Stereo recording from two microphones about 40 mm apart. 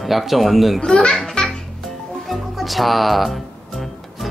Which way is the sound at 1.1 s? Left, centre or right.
Centre.